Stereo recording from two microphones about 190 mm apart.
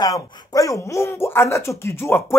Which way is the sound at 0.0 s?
20° left (ahead or behind).